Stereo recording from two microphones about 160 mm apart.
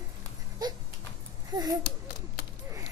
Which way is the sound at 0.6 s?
25° right (ahead or behind).